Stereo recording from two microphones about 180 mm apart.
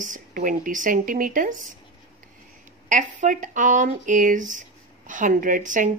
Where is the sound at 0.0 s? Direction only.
45° right (ahead or behind).